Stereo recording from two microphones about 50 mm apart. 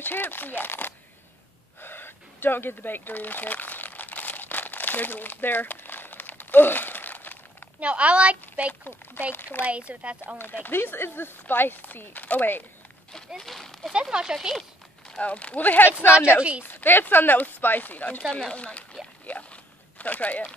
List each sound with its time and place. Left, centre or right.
0.0 s speech: left
1.8 s a sound: left
7.8 s a woman's voice: right
8.8 s speech: left
9.7 s a woman's voice: right
10.4 s speech: left
13.4 s speech: centre
14.1 s speech: centre
15.2 s speech: left
16.3 s a woman's voice: right
16.6 s speech: left
19.2 s a sound: left